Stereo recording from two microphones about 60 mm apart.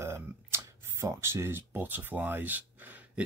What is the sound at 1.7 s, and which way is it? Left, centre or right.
Speech, right.